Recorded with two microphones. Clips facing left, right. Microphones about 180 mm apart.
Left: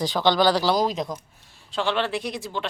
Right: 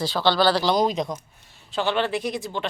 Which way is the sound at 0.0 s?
15° left (ahead or behind).